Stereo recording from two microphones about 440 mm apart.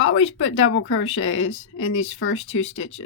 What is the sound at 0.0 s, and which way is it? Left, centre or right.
Speech, left.